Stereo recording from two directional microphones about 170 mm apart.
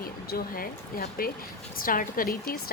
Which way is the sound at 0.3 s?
60° left (ahead or behind).